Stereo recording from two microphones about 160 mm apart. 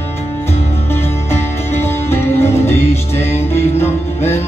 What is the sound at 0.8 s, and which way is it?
Music, 15° left (ahead or behind).